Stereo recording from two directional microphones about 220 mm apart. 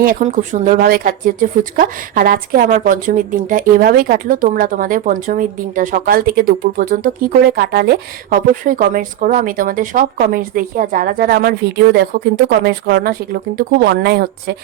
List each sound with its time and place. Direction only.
0.0 s speech: 35° right (ahead or behind)